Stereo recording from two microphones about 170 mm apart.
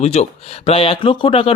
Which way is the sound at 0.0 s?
35° left (ahead or behind).